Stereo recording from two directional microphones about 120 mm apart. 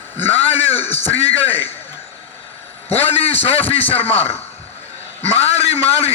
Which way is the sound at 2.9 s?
55° left (ahead or behind).